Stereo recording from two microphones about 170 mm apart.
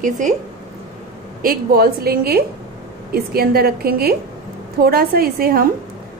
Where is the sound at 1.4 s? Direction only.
60° right (ahead or behind).